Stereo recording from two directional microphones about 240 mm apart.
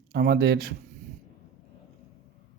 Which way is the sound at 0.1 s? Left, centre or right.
Right.